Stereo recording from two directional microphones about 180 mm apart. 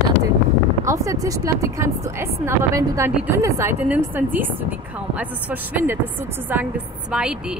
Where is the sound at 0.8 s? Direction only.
15° right (ahead or behind).